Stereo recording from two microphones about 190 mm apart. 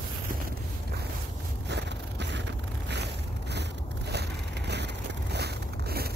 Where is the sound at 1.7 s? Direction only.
65° right (ahead or behind).